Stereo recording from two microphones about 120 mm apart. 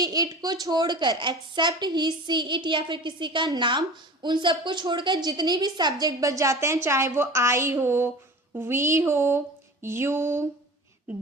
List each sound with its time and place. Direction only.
0.0 s a woman's voice: 30° right (ahead or behind)